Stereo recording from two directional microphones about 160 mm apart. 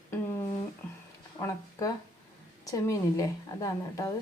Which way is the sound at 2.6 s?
20° left (ahead or behind).